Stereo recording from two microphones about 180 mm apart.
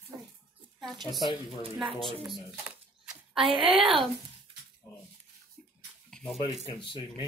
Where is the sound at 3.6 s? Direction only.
Centre (ahead or behind).